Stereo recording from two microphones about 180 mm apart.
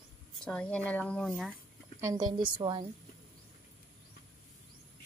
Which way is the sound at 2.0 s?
20° right (ahead or behind).